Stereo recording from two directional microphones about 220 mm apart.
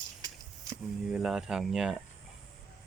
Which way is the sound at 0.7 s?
5° right (ahead or behind).